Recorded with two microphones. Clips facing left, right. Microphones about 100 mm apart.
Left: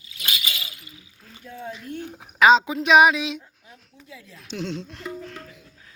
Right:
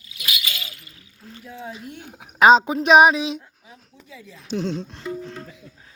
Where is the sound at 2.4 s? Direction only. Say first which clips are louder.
Right 2 dB; 40° right (ahead or behind).